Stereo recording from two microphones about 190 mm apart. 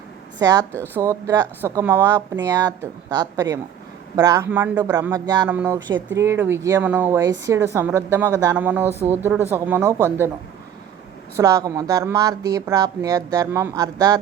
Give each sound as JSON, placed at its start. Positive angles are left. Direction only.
{"t": 0.3, "sound": "a woman's voice", "side_deg": -20}
{"t": 11.3, "sound": "speech", "side_deg": -15}